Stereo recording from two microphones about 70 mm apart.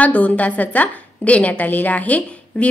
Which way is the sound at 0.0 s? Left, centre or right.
Left.